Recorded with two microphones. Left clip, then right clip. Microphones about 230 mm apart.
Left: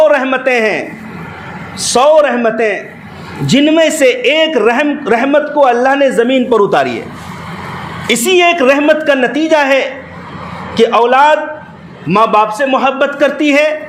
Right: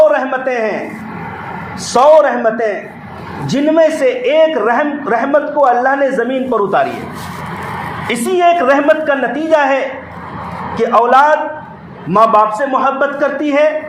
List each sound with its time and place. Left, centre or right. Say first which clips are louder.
0.1 s a sound: left 4 dB; left
1.9 s a man's voice: even; left
8.0 s a man's voice: left 3 dB; left